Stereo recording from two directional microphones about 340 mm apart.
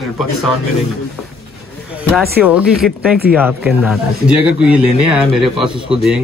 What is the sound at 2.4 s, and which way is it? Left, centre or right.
Speech, centre.